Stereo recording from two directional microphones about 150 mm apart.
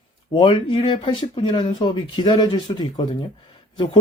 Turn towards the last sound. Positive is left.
turn(degrees=30)  # may be behind; listen again after turning